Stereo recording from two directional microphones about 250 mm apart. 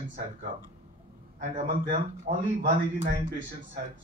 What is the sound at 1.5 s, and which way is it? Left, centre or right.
A man's voice, right.